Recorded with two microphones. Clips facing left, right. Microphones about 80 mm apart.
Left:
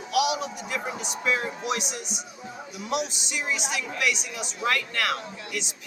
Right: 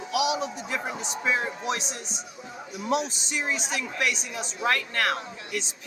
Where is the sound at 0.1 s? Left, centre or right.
Right.